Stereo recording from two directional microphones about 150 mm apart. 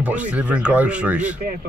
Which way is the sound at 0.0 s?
10° right (ahead or behind).